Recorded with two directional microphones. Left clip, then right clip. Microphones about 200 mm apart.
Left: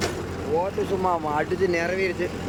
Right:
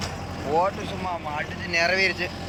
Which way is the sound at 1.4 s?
15° left (ahead or behind).